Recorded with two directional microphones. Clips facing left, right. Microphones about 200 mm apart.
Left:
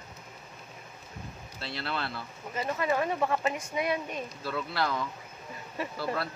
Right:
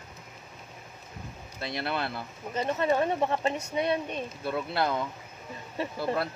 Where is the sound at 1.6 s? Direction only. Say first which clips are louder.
Right 4 dB; 20° right (ahead or behind).